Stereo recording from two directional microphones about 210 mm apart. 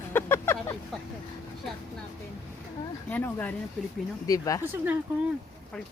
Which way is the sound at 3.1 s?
10° left (ahead or behind).